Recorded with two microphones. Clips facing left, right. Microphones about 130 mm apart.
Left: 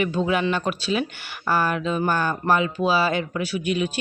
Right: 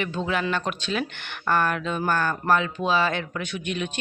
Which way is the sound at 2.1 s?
15° left (ahead or behind).